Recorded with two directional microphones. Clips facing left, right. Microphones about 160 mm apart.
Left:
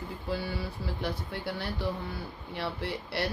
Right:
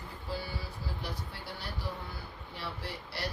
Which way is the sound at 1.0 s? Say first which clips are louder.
Left 7 dB; 60° left (ahead or behind).